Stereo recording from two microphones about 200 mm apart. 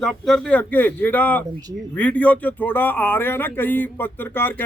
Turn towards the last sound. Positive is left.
turn(degrees=10)  # may be behind; listen again after turning